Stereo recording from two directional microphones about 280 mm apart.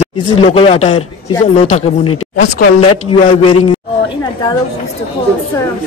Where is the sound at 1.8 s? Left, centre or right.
Left.